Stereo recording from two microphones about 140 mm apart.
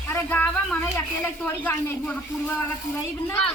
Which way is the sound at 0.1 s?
15° left (ahead or behind).